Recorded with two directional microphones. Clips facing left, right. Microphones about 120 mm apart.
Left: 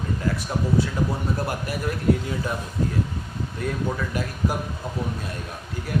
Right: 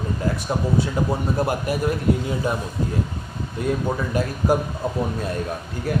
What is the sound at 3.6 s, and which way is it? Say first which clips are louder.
Speech: right 5 dB; 15° right (ahead or behind).